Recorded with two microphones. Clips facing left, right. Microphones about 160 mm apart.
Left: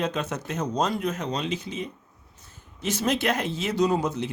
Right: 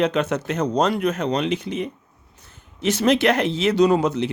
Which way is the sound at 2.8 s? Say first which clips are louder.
Right 7 dB; 75° right (ahead or behind).